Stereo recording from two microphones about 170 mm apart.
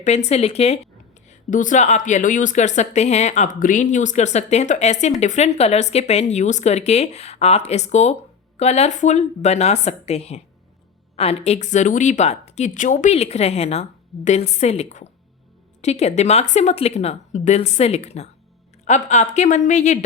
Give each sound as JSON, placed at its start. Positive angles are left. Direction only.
{"t": 0.0, "sound": "a woman's voice", "side_deg": 40}
{"t": 1.3, "sound": "a woman's voice", "side_deg": 50}